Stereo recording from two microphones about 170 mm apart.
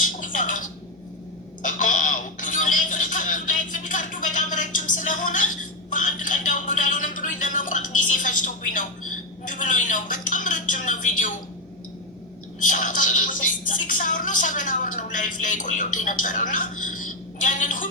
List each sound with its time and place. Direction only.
0.0 s a sound: 50° left (ahead or behind)
5.9 s music: 50° left (ahead or behind)
12.6 s speech: 50° left (ahead or behind)